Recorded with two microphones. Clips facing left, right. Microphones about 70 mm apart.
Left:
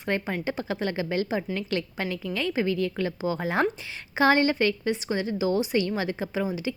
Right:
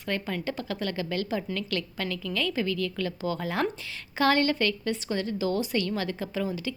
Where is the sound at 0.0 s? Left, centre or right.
Left.